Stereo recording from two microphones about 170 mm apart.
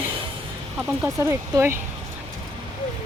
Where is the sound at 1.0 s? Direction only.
15° right (ahead or behind).